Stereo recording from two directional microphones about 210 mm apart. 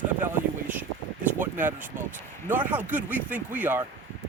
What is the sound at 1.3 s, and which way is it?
Speech, 10° right (ahead or behind).